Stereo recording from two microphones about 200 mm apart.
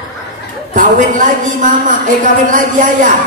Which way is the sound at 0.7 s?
40° right (ahead or behind).